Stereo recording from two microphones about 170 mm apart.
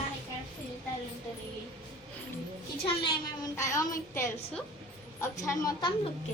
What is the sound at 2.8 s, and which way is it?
Speech, 30° left (ahead or behind).